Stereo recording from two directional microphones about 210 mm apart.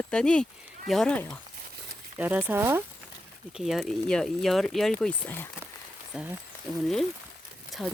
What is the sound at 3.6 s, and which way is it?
Speech, centre (ahead or behind).